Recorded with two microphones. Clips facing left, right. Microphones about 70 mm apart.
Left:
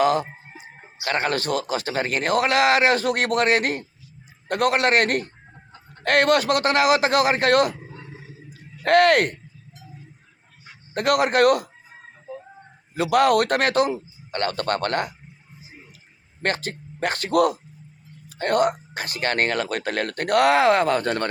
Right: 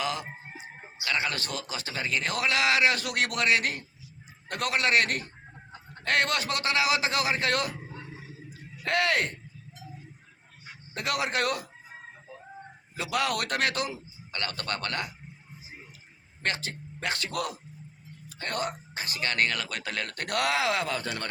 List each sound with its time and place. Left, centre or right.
0.0 s speech: left
6.0 s speech: left
8.8 s a man's voice: left
10.9 s a man's voice: left
13.0 s speech: left
16.4 s speech: left